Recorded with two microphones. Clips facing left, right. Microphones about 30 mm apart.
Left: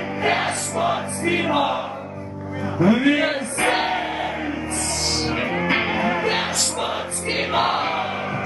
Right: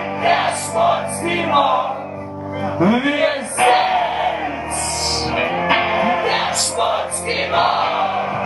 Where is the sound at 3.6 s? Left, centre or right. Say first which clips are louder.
Right 7 dB; right.